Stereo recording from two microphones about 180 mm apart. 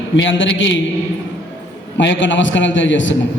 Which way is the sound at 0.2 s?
90° left.